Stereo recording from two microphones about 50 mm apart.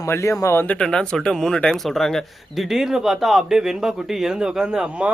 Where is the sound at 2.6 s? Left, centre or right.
Centre.